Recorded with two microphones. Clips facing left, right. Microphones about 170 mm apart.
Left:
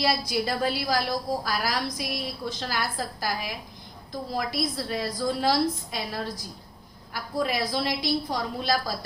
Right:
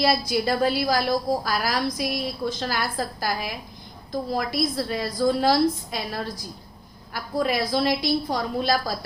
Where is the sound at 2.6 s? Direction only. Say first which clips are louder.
Right 3 dB; 50° right (ahead or behind).